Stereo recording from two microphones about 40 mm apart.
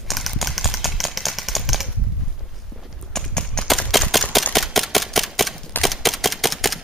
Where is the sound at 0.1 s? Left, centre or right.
Centre.